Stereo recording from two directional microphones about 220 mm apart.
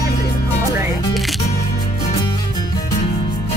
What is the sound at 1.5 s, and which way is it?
Music, 40° left (ahead or behind).